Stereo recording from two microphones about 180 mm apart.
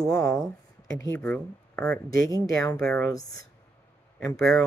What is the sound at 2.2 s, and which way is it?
Speech, 20° left (ahead or behind).